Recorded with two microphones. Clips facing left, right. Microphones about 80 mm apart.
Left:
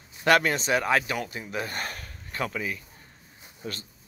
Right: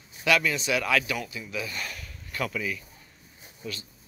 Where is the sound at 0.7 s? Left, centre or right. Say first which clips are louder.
Left 2 dB; left.